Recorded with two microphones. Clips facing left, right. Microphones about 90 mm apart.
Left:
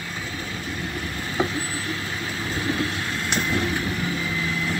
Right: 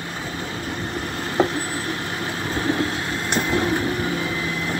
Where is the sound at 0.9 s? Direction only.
50° right (ahead or behind).